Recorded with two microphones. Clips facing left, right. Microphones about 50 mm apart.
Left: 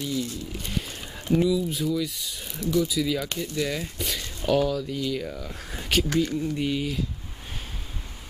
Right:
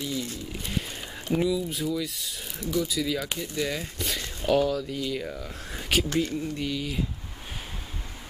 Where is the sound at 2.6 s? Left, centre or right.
Centre.